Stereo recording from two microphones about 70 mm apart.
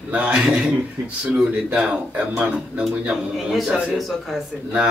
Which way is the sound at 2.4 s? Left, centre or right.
Centre.